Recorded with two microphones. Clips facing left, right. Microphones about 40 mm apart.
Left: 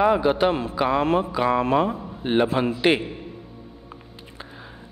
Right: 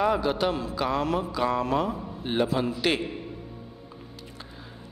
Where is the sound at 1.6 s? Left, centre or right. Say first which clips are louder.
Left 5 dB; left.